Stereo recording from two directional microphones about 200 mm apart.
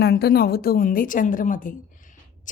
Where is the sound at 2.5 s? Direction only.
40° left (ahead or behind).